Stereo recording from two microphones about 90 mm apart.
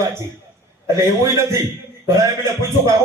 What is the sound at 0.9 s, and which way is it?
Speech, 35° right (ahead or behind).